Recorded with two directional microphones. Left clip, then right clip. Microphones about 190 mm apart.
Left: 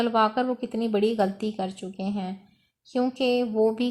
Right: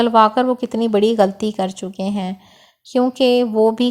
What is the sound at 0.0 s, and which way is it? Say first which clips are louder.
A woman's voice: right 10 dB; 30° right (ahead or behind).